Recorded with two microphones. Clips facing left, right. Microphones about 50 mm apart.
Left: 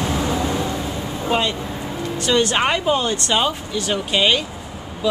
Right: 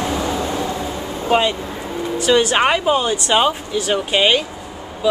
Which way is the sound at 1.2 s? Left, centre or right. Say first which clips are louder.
Right 4 dB; centre.